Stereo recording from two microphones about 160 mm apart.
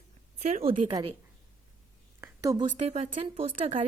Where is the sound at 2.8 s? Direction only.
40° right (ahead or behind).